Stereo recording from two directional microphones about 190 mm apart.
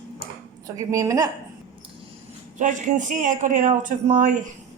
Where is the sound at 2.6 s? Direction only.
40° right (ahead or behind).